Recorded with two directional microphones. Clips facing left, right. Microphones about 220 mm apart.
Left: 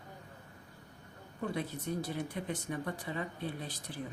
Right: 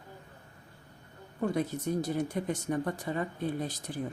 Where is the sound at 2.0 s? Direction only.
45° right (ahead or behind).